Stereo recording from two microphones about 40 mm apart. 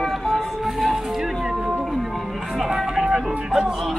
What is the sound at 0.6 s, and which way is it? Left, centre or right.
Speech, centre.